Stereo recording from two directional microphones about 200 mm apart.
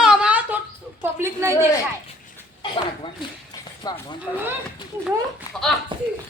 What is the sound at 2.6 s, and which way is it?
Speech, 25° left (ahead or behind).